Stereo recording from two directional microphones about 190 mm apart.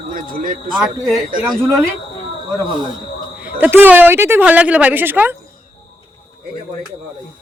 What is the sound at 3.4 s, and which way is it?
A man's voice, 10° right (ahead or behind).